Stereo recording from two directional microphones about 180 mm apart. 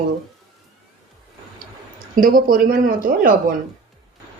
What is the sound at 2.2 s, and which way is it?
Speech, 50° right (ahead or behind).